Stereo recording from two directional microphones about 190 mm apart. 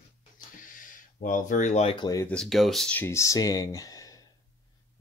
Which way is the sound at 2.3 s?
5° left (ahead or behind).